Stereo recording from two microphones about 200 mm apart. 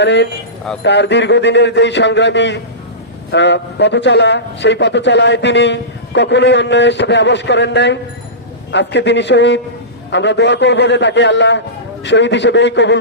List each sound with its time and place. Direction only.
0.0 s a man's voice: 60° left (ahead or behind)